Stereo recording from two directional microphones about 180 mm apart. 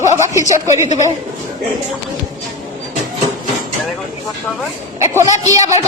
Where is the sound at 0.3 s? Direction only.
15° right (ahead or behind).